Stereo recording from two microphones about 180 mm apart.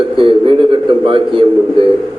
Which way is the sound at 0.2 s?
30° right (ahead or behind).